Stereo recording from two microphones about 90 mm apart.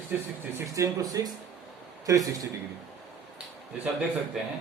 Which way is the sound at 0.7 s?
40° right (ahead or behind).